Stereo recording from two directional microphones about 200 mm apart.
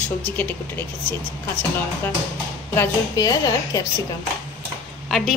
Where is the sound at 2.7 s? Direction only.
20° left (ahead or behind).